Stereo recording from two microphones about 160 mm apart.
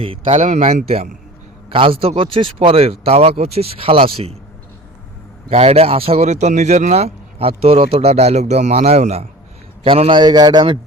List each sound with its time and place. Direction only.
0.0 s speech: 35° right (ahead or behind)
0.4 s speech: 50° right (ahead or behind)
5.5 s a man's voice: 40° right (ahead or behind)